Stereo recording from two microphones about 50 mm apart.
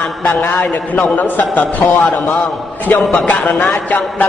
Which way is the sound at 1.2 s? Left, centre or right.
Left.